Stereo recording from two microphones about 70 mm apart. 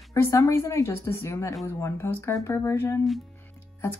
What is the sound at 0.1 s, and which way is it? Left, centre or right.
A woman's voice, left.